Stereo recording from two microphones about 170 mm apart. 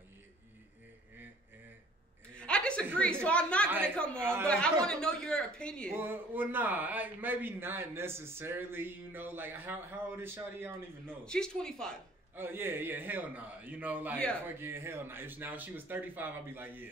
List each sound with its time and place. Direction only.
2.3 s chuckle: 5° left (ahead or behind)
3.3 s a woman's voice: 5° left (ahead or behind)
3.6 s a man's voice: 10° right (ahead or behind)
3.9 s speech: 5° left (ahead or behind)
4.2 s a man's voice: 15° right (ahead or behind)
4.5 s speech: 5° left (ahead or behind)
5.9 s a man's voice: 10° right (ahead or behind)
11.2 s speech: 5° left (ahead or behind)
12.4 s a man's voice: 15° right (ahead or behind)